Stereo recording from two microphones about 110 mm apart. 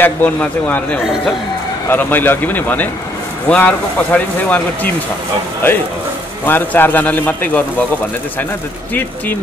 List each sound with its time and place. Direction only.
0.0 s speech: 15° left (ahead or behind)
6.4 s speech: 20° left (ahead or behind)